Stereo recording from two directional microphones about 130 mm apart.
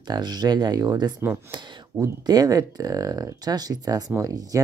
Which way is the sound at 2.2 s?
30° right (ahead or behind).